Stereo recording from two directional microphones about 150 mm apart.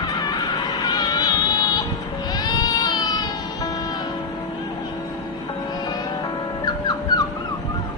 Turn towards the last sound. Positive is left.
turn(degrees=25)  # may be behind; listen again after turning